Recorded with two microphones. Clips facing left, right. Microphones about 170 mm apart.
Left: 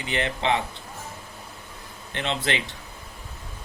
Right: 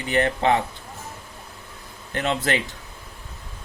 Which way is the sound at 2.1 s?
45° right (ahead or behind).